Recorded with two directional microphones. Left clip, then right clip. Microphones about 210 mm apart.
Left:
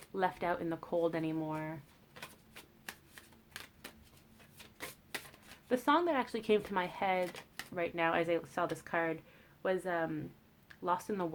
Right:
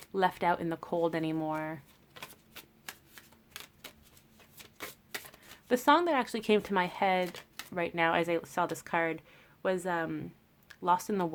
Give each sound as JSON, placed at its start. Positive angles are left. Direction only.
{"t": 0.1, "sound": "speech", "side_deg": -40}
{"t": 2.2, "sound": "typewriter", "side_deg": -25}
{"t": 5.6, "sound": "speech", "side_deg": -40}
{"t": 7.3, "sound": "shuffling cards", "side_deg": -20}
{"t": 7.7, "sound": "speech", "side_deg": -40}